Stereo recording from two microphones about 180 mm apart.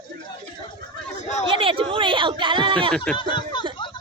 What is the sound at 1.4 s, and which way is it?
Speech, 30° right (ahead or behind).